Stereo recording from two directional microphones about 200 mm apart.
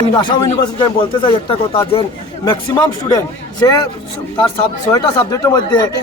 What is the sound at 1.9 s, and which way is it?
Speech, 20° left (ahead or behind).